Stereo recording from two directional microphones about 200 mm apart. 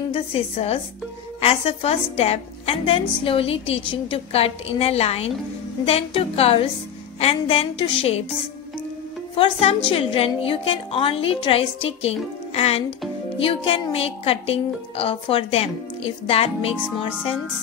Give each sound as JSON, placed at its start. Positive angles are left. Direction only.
{"t": 0.1, "sound": "a woman's voice", "side_deg": 30}
{"t": 9.3, "sound": "a woman's voice", "side_deg": 30}